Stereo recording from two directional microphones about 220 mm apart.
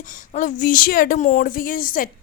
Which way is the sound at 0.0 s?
35° left (ahead or behind).